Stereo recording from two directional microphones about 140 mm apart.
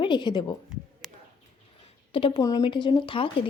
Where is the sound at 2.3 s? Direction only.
25° left (ahead or behind).